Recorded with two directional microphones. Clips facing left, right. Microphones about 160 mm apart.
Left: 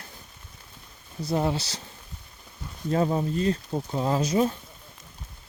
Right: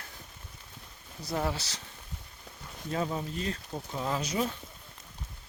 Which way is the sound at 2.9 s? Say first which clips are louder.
Left 8 dB; 45° left (ahead or behind).